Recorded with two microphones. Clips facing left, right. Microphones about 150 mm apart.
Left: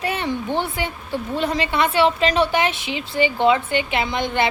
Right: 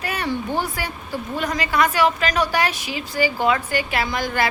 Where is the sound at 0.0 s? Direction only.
25° left (ahead or behind).